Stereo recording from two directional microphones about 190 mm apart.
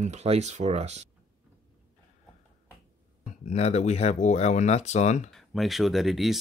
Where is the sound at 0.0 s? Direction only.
35° right (ahead or behind).